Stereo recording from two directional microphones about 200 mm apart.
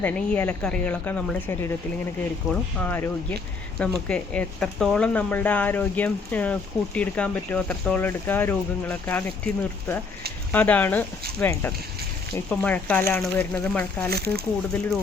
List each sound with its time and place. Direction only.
0.0 s speech: 5° left (ahead or behind)
10.5 s speech: 10° left (ahead or behind)
14.1 s speech: 50° right (ahead or behind)